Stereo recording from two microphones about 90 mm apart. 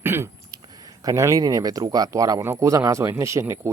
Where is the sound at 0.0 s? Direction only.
25° right (ahead or behind).